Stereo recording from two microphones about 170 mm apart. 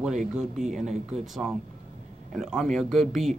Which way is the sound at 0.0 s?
5° right (ahead or behind).